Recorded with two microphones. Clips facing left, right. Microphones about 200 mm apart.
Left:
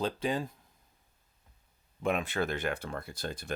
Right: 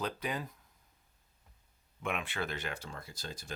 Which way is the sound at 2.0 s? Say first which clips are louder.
Left 6 dB; 40° left (ahead or behind).